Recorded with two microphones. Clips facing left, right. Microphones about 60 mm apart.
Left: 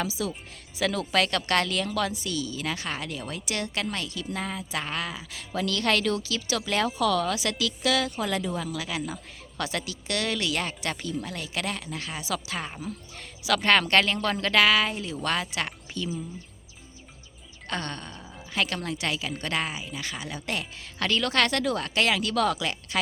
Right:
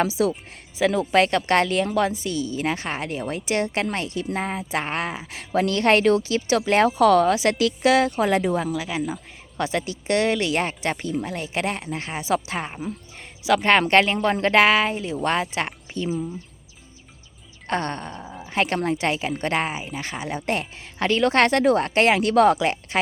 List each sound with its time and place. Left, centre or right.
0.0 s speech: right
0.8 s a woman's voice: right
8.7 s a woman's voice: centre
17.7 s a woman's voice: right